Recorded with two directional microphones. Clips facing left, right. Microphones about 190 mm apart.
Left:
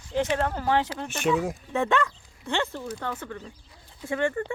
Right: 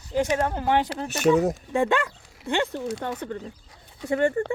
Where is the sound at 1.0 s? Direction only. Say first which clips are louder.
Right 5 dB; 40° right (ahead or behind).